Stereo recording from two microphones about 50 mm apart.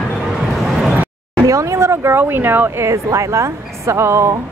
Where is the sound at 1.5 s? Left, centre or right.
Right.